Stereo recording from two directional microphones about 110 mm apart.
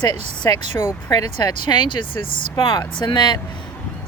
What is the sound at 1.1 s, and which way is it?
Speech, 35° left (ahead or behind).